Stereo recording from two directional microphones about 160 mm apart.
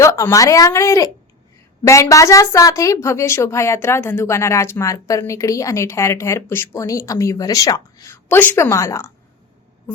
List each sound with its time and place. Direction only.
0.0 s a woman's voice: 20° left (ahead or behind)